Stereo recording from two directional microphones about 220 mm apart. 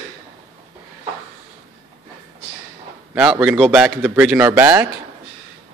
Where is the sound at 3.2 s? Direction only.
Centre (ahead or behind).